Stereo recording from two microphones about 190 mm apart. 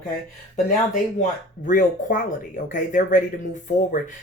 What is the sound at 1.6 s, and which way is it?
Speech, 45° left (ahead or behind).